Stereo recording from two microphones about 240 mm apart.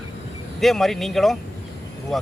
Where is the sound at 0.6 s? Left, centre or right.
Centre.